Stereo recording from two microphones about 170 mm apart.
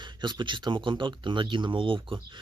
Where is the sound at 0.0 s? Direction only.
25° right (ahead or behind).